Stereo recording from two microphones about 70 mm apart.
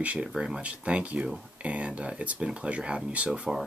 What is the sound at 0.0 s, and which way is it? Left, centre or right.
Speech, centre.